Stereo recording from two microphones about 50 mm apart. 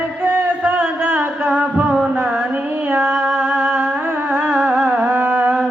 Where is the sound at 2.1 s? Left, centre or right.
Right.